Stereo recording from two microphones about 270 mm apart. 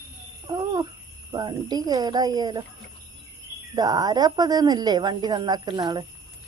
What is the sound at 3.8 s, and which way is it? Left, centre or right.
Speech, centre.